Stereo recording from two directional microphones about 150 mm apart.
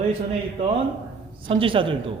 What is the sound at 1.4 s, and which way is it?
Speech, 35° right (ahead or behind).